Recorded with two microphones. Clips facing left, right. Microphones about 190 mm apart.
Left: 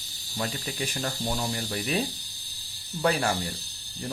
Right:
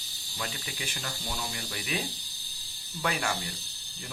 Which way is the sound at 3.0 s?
35° left (ahead or behind).